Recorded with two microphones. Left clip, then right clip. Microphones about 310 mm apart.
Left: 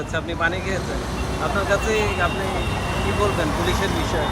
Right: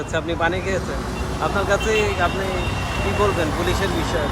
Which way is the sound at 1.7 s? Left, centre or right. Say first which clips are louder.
Right 2 dB; centre.